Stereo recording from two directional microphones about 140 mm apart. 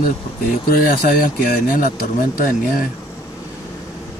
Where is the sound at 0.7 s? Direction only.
90° left.